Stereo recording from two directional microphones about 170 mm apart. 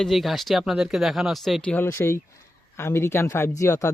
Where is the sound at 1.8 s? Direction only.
15° left (ahead or behind).